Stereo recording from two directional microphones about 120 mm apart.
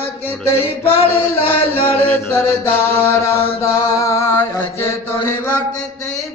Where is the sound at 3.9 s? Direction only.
25° left (ahead or behind).